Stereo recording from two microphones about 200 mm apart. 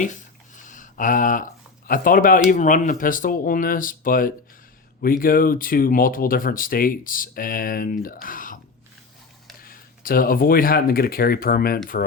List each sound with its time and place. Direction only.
0.0 s a sound: 40° left (ahead or behind)
1.9 s speech: 45° left (ahead or behind)
9.6 s speech: 45° left (ahead or behind)